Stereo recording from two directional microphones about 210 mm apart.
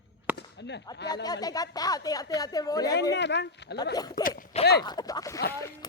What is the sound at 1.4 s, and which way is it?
A woman's voice, 15° left (ahead or behind).